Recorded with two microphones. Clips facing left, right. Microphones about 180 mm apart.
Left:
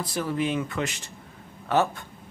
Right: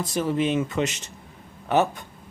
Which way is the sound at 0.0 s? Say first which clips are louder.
Right 3 dB; 20° right (ahead or behind).